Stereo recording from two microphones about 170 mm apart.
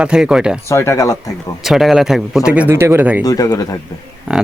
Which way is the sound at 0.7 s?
15° left (ahead or behind).